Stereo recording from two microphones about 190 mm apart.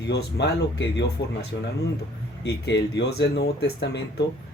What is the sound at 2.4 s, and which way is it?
Speech, 60° left (ahead or behind).